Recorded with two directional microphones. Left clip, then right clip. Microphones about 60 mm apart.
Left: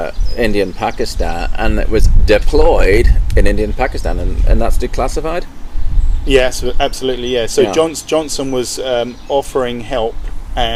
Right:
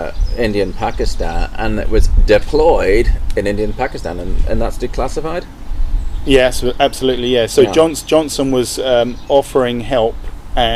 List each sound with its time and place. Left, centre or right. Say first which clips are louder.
0.0 s speech: left 2 dB; left
6.2 s speech: right 1 dB; right